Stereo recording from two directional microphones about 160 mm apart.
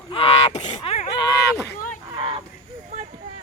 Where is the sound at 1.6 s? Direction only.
60° left (ahead or behind).